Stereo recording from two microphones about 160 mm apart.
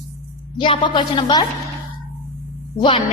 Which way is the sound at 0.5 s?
30° left (ahead or behind).